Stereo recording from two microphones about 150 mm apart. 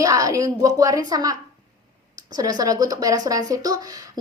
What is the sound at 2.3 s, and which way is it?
Speech, 25° right (ahead or behind).